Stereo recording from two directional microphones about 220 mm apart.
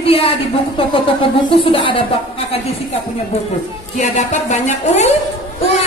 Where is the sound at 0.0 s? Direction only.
25° left (ahead or behind).